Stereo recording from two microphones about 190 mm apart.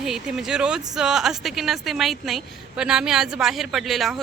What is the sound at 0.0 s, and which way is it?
Speech, centre (ahead or behind).